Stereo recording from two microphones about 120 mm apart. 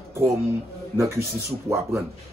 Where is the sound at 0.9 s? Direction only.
20° right (ahead or behind).